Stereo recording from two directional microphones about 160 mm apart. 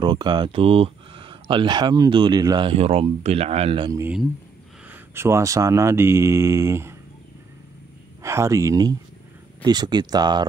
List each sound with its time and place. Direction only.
0.0 s speech: 30° right (ahead or behind)
4.8 s speech: 15° right (ahead or behind)
8.2 s speech: 15° right (ahead or behind)